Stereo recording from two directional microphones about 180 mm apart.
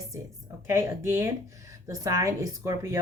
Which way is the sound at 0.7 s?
15° right (ahead or behind).